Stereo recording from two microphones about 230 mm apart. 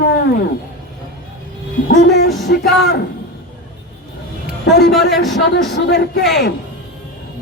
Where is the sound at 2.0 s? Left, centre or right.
Left.